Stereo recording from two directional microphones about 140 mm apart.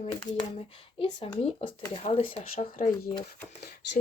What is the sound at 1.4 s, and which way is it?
Speech, 50° left (ahead or behind).